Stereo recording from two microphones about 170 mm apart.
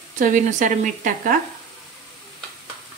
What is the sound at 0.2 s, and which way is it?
Speech, 45° right (ahead or behind).